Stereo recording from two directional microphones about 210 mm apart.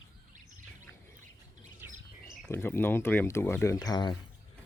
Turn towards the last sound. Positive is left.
turn(degrees=20)  # may be behind; listen again after turning